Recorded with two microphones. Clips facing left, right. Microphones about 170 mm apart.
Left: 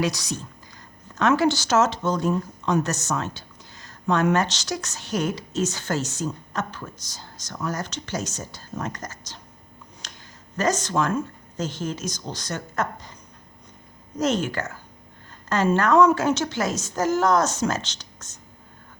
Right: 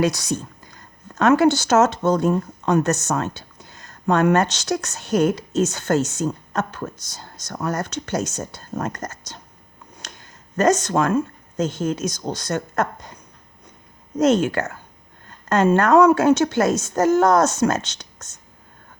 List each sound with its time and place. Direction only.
0.0 s speech: 50° right (ahead or behind)
10.2 s a woman's voice: 55° right (ahead or behind)
14.5 s a woman's voice: 55° right (ahead or behind)